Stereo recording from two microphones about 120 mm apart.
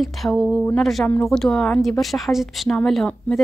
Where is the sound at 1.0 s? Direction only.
15° left (ahead or behind).